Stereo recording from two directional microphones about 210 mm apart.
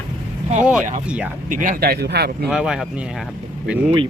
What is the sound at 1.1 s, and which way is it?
Speech, 5° right (ahead or behind).